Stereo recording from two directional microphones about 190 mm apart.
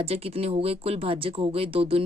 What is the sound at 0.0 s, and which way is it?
Speech, 30° right (ahead or behind).